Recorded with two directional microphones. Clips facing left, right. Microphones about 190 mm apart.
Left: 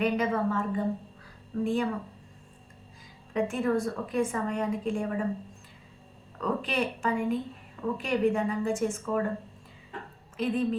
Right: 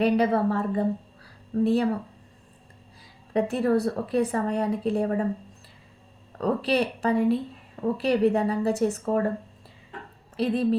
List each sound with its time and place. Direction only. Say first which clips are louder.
0.0 s a woman's voice: right 5 dB; 35° right (ahead or behind)
3.3 s a woman's voice: right 4 dB; 35° right (ahead or behind)
6.4 s a woman's voice: right 5 dB; 35° right (ahead or behind)
10.3 s speech: right 4 dB; 35° right (ahead or behind)